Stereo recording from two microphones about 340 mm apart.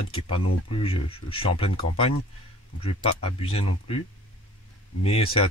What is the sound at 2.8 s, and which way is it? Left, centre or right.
Speech, centre.